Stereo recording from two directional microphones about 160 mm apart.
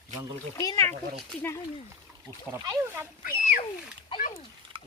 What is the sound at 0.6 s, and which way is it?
Speech, 20° left (ahead or behind).